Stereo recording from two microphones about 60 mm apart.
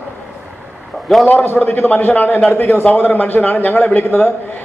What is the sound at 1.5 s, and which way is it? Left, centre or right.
A man's voice, left.